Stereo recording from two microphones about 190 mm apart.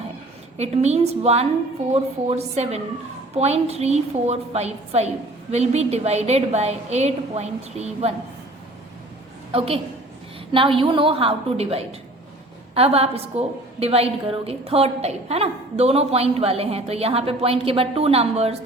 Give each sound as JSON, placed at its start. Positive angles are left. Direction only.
{"t": 0.5, "sound": "a woman's voice", "side_deg": -35}
{"t": 9.5, "sound": "a woman's voice", "side_deg": -30}